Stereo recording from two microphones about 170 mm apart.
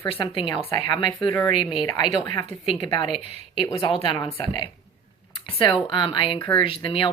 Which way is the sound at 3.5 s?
30° left (ahead or behind).